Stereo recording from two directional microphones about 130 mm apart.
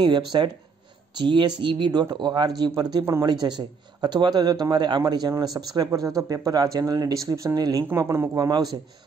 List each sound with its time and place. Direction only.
0.3 s speech: 35° right (ahead or behind)